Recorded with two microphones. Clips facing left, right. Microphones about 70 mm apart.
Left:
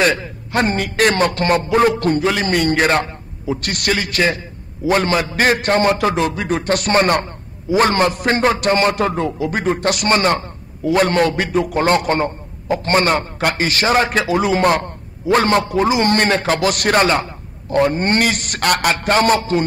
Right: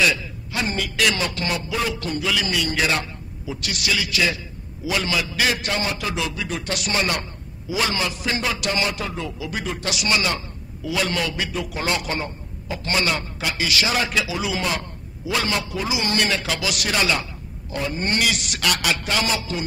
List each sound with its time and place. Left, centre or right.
0.0 s a man's voice: left